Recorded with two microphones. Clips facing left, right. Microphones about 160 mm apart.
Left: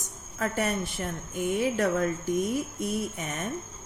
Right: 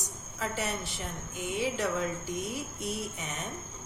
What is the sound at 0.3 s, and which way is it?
A woman's voice, 50° left (ahead or behind).